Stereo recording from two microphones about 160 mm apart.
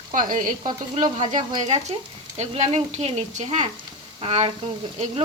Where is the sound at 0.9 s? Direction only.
45° right (ahead or behind).